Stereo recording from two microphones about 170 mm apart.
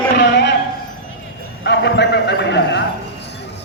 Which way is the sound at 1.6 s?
90° left.